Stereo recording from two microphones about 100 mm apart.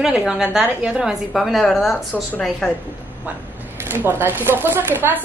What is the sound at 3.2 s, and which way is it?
Speech, 15° right (ahead or behind).